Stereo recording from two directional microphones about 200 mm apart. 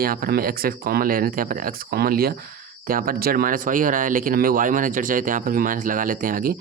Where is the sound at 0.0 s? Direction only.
45° right (ahead or behind).